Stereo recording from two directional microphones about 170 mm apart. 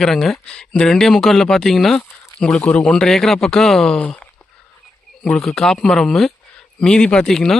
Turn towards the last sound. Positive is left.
turn(degrees=0)  # may be behind; listen again after turning